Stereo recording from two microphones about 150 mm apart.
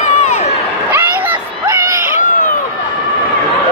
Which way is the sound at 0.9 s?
15° right (ahead or behind).